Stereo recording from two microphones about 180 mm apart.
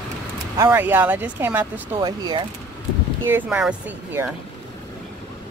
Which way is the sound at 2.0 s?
25° right (ahead or behind).